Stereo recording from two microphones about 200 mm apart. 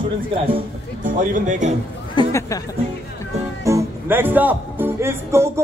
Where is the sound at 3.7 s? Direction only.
10° right (ahead or behind).